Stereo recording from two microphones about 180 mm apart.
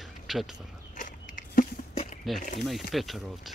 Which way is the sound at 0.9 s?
50° left (ahead or behind).